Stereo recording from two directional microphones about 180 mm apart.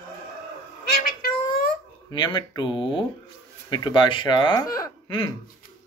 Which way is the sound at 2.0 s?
25° left (ahead or behind).